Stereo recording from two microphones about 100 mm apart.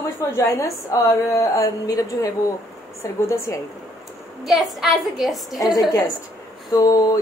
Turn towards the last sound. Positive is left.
turn(degrees=35)  # may be behind; listen again after turning